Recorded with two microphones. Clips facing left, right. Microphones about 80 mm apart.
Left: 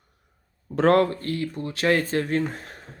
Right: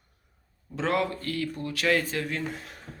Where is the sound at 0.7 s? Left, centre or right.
Left.